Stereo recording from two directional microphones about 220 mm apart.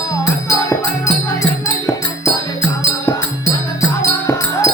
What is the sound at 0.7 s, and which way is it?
Music, 15° left (ahead or behind).